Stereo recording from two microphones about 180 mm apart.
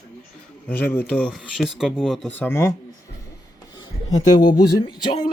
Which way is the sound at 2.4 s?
15° left (ahead or behind).